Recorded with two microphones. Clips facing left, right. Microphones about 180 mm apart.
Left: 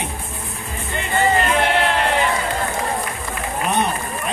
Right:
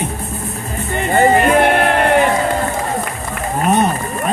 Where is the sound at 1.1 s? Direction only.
50° right (ahead or behind).